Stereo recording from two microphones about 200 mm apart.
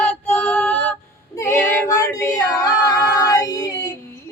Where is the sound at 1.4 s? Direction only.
15° left (ahead or behind).